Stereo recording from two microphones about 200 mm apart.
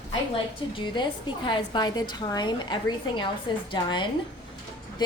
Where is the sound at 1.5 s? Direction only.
25° left (ahead or behind).